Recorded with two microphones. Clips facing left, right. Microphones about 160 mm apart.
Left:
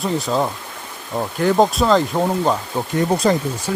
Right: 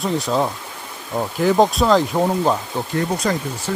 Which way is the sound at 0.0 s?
Centre (ahead or behind).